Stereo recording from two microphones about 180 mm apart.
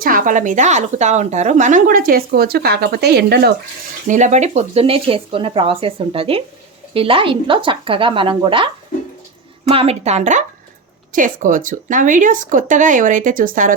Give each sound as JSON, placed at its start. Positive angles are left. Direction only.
{"t": 0.0, "sound": "speech", "side_deg": -50}
{"t": 4.1, "sound": "speech", "side_deg": -40}